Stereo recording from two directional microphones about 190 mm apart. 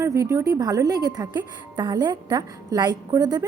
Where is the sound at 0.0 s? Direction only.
15° right (ahead or behind).